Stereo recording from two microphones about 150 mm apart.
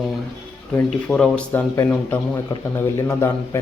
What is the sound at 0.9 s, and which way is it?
A man's voice, 5° left (ahead or behind).